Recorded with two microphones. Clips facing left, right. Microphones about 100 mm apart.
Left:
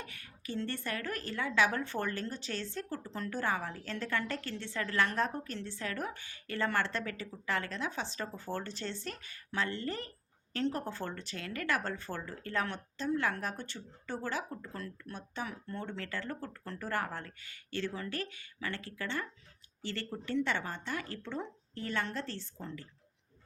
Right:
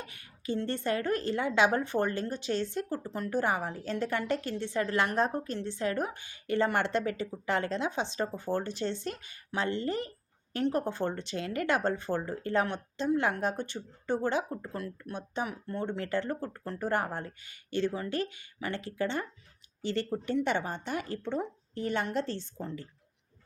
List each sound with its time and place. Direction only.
0.0 s a woman's voice: 20° right (ahead or behind)